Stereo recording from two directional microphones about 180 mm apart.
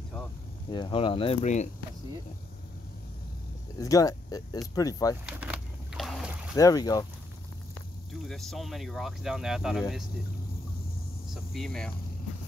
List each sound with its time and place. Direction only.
0.7 s speech: 25° left (ahead or behind)
3.7 s speech: 20° left (ahead or behind)
5.2 s boat: 10° right (ahead or behind)
6.5 s speech: 20° left (ahead or behind)
8.1 s speech: centre (ahead or behind)
11.3 s speech: centre (ahead or behind)